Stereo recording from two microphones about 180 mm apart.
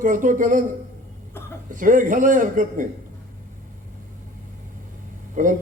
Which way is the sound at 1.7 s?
45° right (ahead or behind).